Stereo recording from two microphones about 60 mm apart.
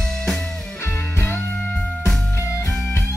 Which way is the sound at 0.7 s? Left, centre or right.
Left.